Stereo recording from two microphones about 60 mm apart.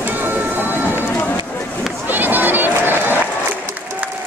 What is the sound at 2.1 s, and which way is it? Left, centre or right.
Run, right.